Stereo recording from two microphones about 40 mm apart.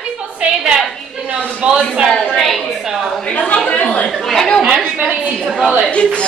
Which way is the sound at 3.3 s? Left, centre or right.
Left.